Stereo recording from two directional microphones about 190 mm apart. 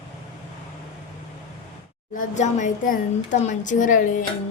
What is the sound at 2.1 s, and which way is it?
Speech, 40° left (ahead or behind).